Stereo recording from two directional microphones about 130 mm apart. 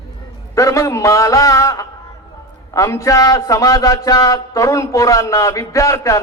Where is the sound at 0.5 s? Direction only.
25° left (ahead or behind).